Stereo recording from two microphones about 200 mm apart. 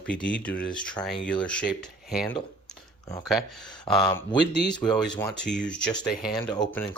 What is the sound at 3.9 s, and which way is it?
Speech, 25° left (ahead or behind).